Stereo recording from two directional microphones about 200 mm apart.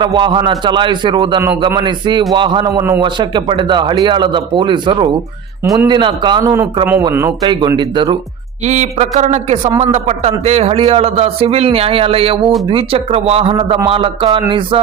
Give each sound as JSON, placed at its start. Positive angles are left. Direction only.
{"t": 0.0, "sound": "a man's voice", "side_deg": -25}
{"t": 7.4, "sound": "a man's voice", "side_deg": -20}
{"t": 8.6, "sound": "a man's voice", "side_deg": -35}